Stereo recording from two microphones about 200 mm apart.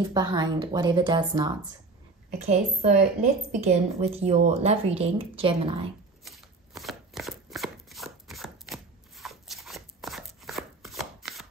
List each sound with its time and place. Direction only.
0.1 s speech: 20° right (ahead or behind)
2.3 s a woman's voice: 35° right (ahead or behind)
6.2 s chopping: centre (ahead or behind)